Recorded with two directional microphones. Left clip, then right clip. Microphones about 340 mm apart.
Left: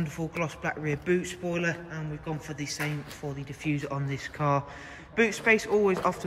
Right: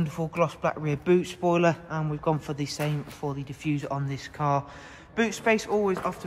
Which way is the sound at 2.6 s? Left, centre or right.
Right.